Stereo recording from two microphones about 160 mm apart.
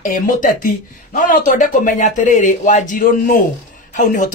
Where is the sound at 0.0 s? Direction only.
55° left (ahead or behind).